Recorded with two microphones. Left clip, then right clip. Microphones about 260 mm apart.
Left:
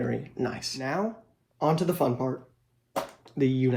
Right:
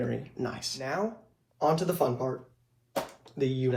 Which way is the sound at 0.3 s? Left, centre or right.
Left.